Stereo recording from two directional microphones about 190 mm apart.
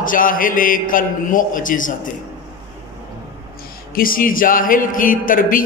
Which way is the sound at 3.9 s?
50° left (ahead or behind).